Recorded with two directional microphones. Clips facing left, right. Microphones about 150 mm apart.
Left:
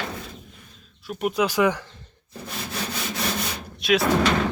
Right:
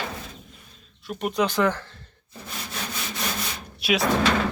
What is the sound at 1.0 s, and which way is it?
Speech, 5° left (ahead or behind).